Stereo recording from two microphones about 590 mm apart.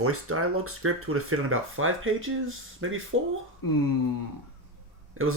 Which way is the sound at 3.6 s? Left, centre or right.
Left.